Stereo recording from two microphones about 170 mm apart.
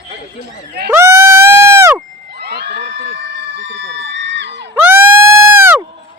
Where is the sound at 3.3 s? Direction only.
90° right.